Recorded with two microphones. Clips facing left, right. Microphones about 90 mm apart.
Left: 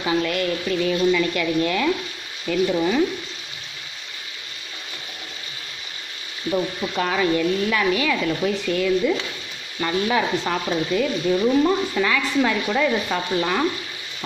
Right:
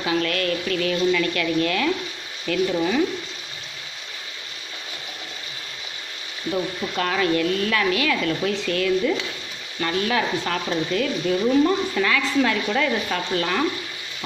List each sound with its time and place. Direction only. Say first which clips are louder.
0.0 s speech: left 1 dB; 15° left (ahead or behind)
7.0 s speech: left 1 dB; 10° left (ahead or behind)